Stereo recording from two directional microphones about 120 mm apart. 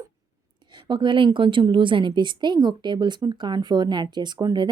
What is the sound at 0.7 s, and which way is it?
A woman's voice, 40° right (ahead or behind).